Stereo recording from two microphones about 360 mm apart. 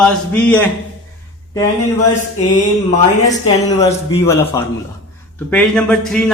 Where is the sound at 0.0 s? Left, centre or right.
Centre.